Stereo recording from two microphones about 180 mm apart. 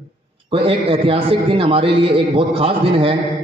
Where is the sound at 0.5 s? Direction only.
30° right (ahead or behind).